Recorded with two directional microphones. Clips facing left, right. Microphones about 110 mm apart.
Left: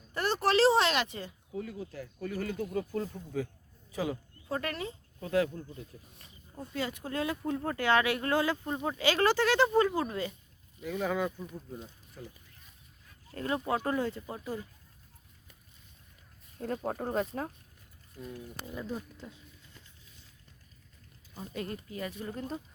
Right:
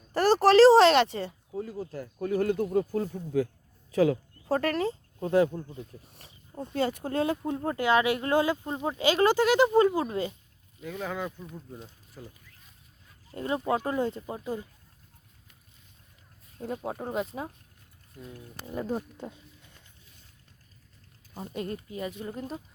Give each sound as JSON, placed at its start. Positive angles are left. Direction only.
{"t": 0.1, "sound": "speech", "side_deg": -35}
{"t": 3.9, "sound": "speech", "side_deg": -90}
{"t": 4.4, "sound": "speech", "side_deg": -40}
{"t": 10.8, "sound": "speech", "side_deg": 0}
{"t": 12.2, "sound": "speech", "side_deg": -15}
{"t": 13.3, "sound": "speech", "side_deg": -20}
{"t": 16.6, "sound": "speech", "side_deg": -10}
{"t": 18.7, "sound": "speech", "side_deg": -40}
{"t": 21.9, "sound": "speech", "side_deg": -20}